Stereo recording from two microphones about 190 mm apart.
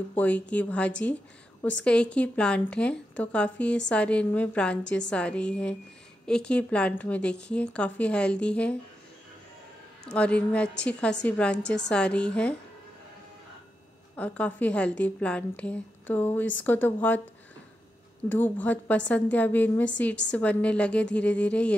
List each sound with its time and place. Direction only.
0.1 s a woman's voice: 10° left (ahead or behind)
10.1 s a woman's voice: 5° left (ahead or behind)
14.1 s a woman's voice: 5° left (ahead or behind)
18.3 s a woman's voice: 10° left (ahead or behind)